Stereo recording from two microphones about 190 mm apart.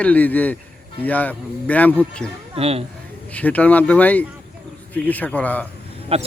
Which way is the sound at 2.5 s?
30° right (ahead or behind).